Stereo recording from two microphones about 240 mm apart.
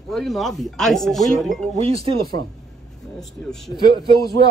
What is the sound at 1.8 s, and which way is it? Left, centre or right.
Speech, right.